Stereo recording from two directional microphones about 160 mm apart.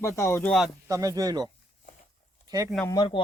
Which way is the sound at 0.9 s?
20° right (ahead or behind).